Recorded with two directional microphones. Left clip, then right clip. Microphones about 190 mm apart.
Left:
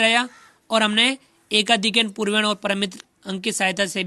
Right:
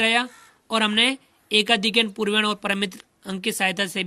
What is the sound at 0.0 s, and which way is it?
A woman's voice, 25° left (ahead or behind).